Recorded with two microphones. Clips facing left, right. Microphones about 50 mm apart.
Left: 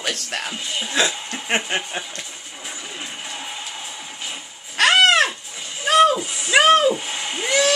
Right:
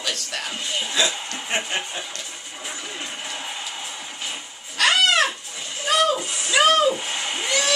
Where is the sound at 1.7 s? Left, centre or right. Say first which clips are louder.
Left 3 dB; centre.